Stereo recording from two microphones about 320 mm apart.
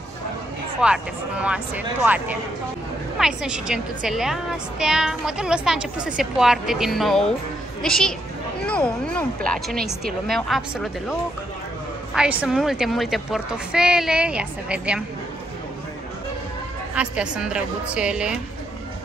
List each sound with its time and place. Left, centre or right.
0.7 s a woman's voice: centre
16.9 s a woman's voice: centre